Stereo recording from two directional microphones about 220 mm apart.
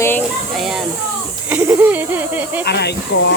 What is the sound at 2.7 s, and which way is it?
Speech, 50° left (ahead or behind).